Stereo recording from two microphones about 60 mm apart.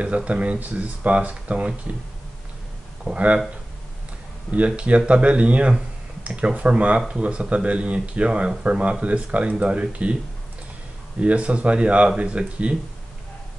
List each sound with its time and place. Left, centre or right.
0.0 s speech: right
3.1 s speech: right
4.5 s speech: right
11.1 s speech: right